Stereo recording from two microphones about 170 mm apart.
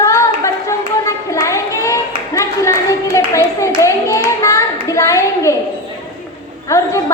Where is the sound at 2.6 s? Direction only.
20° left (ahead or behind).